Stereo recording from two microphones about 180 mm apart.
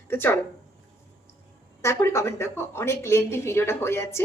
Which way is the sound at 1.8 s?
15° left (ahead or behind).